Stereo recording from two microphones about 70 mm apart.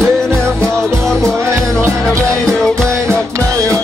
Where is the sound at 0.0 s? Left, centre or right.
Centre.